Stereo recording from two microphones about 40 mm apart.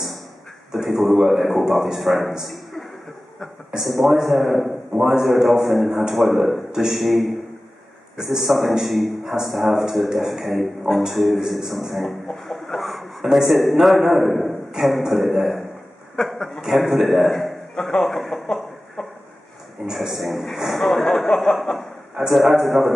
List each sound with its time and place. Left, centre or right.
0.8 s a man's voice: centre
2.4 s a sound: centre
3.8 s a man's voice: centre
16.6 s a man's voice: centre
19.0 s a sound: left
19.8 s a man's voice: centre
21.0 s a man's voice: centre
22.3 s a man's voice: centre